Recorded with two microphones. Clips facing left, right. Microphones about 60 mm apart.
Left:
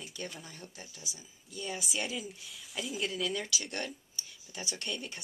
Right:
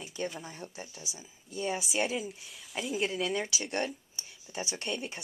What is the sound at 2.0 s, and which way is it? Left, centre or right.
Speech, centre.